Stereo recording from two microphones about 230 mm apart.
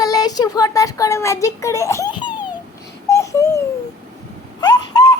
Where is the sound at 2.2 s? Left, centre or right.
Centre.